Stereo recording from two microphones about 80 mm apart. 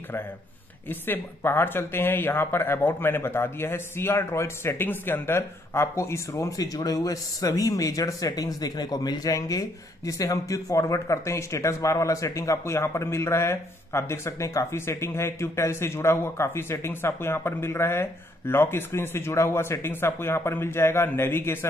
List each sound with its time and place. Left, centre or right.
0.8 s speech: left